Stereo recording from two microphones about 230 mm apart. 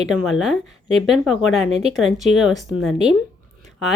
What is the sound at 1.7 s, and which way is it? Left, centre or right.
Speech, right.